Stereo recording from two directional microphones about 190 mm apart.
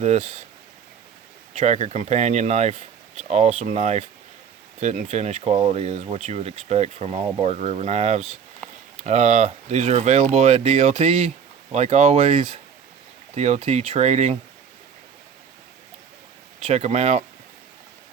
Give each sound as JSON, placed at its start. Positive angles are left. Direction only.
{"t": 0.0, "sound": "speech", "side_deg": -35}
{"t": 1.5, "sound": "speech", "side_deg": -35}
{"t": 16.6, "sound": "speech", "side_deg": -35}